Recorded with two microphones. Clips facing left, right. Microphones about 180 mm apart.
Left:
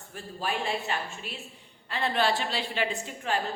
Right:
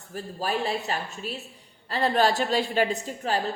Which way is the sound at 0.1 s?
40° right (ahead or behind).